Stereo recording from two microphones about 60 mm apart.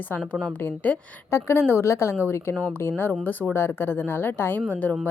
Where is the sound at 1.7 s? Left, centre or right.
Left.